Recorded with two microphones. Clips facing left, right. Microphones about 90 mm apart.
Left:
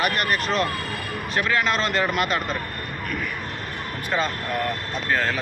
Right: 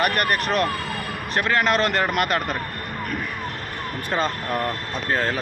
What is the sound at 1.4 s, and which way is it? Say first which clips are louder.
Speech: right 3 dB; 45° right (ahead or behind).